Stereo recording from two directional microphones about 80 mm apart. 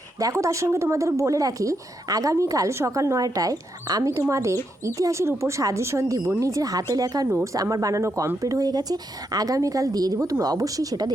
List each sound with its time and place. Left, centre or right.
0.2 s a woman's voice: right